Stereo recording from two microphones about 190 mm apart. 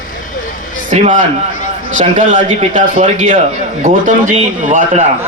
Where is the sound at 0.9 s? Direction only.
40° right (ahead or behind).